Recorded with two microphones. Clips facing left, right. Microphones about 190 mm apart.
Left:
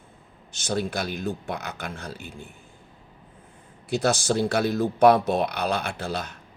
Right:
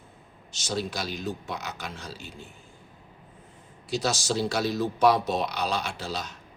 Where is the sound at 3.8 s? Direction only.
55° left (ahead or behind).